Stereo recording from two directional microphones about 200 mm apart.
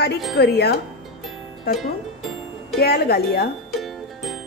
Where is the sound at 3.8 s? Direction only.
Centre (ahead or behind).